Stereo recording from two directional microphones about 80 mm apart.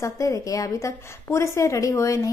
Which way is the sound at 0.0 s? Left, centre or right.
Left.